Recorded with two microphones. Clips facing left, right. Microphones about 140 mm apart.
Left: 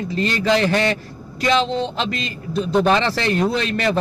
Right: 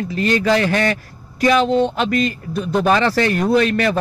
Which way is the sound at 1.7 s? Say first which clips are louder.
Right 6 dB; 50° right (ahead or behind).